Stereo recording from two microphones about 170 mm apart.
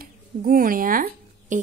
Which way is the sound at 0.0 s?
55° right (ahead or behind).